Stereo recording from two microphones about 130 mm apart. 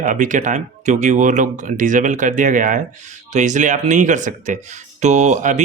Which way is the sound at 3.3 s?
65° right (ahead or behind).